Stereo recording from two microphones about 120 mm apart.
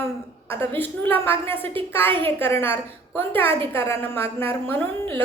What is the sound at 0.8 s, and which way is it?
A woman's voice, 15° left (ahead or behind).